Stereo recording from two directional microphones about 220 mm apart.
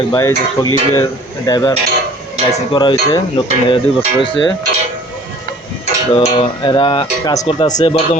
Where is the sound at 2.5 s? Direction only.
20° left (ahead or behind).